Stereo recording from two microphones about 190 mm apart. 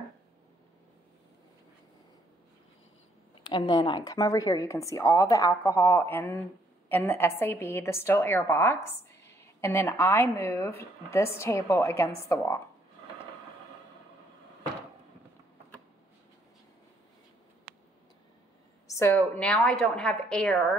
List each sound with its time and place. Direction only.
3.4 s a woman's voice: 25° left (ahead or behind)
18.9 s a woman's voice: 15° left (ahead or behind)